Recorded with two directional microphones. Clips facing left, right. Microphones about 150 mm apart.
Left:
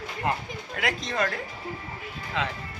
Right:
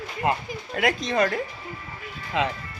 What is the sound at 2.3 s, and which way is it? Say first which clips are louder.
Speech: right 5 dB; 20° right (ahead or behind).